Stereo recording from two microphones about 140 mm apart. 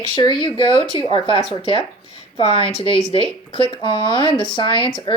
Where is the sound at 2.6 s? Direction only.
40° left (ahead or behind).